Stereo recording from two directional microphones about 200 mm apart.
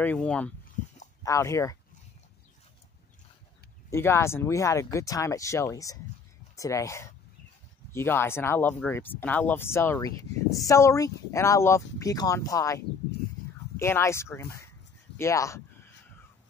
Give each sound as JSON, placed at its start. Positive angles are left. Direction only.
{"t": 0.0, "sound": "speech", "side_deg": 5}
{"t": 3.9, "sound": "speech", "side_deg": 15}